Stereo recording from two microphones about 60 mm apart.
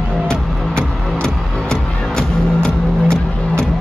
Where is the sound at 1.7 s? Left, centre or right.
Centre.